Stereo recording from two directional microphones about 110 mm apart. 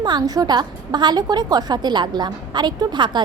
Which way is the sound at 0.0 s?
40° right (ahead or behind).